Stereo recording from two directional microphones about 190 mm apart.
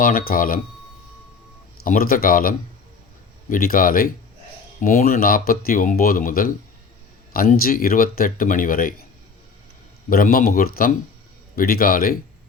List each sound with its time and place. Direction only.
0.0 s speech: 50° left (ahead or behind)
1.8 s speech: 50° left (ahead or behind)
10.1 s speech: 50° left (ahead or behind)